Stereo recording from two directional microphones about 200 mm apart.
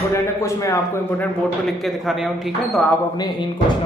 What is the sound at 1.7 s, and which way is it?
A man's voice, centre (ahead or behind).